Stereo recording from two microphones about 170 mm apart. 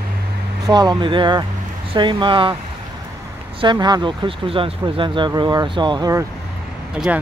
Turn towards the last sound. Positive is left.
turn(degrees=-5)  # may be behind; listen again after turning